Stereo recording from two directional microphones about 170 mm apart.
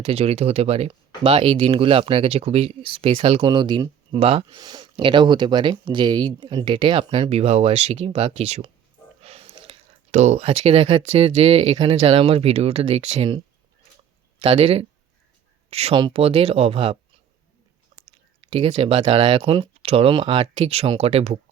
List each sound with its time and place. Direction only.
0.0 s speech: 35° right (ahead or behind)
18.3 s a sound: 30° right (ahead or behind)
18.7 s speech: 35° right (ahead or behind)